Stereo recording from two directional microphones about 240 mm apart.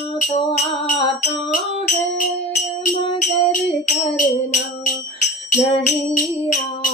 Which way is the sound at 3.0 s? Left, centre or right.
Left.